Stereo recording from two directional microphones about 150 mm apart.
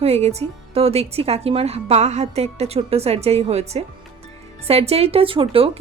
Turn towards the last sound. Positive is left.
turn(degrees=-35)  # may be behind; listen again after turning